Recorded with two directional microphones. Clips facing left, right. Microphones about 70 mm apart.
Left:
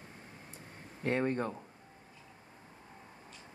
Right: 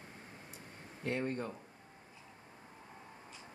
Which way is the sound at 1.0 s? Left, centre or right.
Left.